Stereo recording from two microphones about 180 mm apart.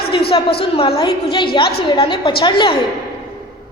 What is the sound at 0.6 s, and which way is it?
A woman's voice, 30° left (ahead or behind).